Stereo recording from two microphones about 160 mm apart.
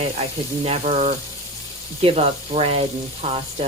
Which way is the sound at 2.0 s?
40° right (ahead or behind).